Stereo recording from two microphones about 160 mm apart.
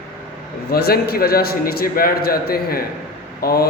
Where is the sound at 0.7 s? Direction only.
75° left (ahead or behind).